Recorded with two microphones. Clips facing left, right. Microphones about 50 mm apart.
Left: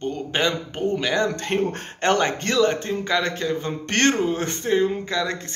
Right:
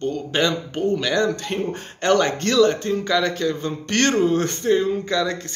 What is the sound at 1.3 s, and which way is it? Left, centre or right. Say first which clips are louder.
Speech: left 1 dB; left.